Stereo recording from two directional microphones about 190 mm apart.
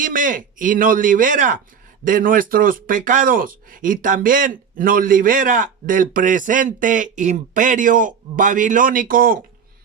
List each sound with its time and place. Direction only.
0.0 s speech: 45° right (ahead or behind)